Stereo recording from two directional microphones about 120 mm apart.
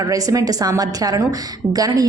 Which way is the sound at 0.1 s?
30° right (ahead or behind).